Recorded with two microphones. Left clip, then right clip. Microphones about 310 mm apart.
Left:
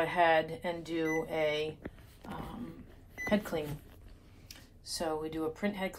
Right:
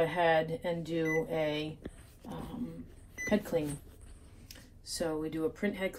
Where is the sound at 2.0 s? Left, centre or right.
Left.